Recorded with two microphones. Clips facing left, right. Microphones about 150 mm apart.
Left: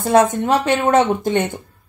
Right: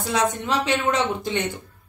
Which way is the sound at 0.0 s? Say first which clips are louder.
Left 9 dB; 50° left (ahead or behind).